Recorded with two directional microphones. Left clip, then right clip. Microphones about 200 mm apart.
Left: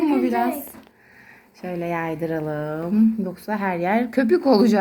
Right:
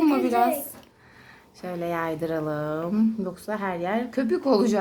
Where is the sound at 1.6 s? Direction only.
5° left (ahead or behind).